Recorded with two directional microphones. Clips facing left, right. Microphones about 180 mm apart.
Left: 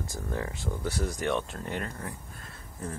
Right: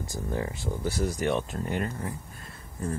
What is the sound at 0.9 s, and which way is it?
Speech, 5° right (ahead or behind).